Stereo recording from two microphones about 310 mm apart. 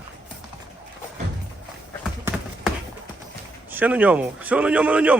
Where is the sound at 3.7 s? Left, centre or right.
Centre.